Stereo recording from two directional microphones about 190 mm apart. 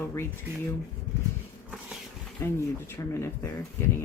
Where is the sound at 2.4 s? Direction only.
10° left (ahead or behind).